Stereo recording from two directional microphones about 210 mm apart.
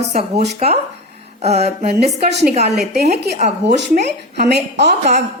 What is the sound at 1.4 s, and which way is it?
Mantra, 30° right (ahead or behind).